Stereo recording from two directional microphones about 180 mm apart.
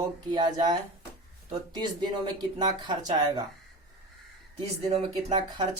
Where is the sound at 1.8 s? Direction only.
25° right (ahead or behind).